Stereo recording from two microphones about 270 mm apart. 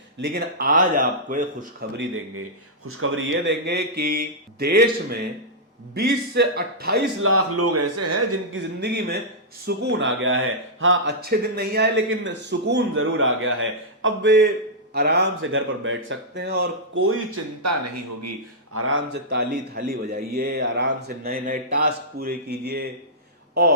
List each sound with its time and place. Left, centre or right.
0.2 s speech: right
2.8 s a man's voice: right
8.5 s speech: right
18.7 s speech: right